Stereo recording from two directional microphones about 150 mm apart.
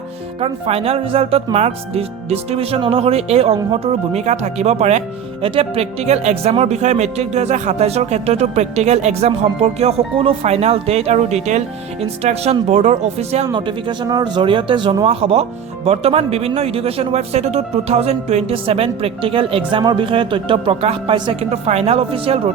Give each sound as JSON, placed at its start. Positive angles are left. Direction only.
{"t": 0.3, "sound": "speech", "side_deg": -40}
{"t": 13.5, "sound": "speech", "side_deg": -30}